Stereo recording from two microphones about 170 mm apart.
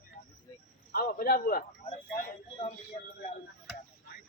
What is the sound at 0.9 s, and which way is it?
Speech, 60° left (ahead or behind).